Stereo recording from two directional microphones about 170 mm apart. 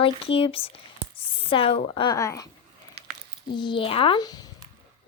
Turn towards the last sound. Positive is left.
turn(degrees=20)  # may be behind; listen again after turning